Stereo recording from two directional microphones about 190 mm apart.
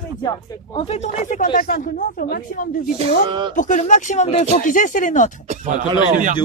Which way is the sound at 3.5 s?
40° left (ahead or behind).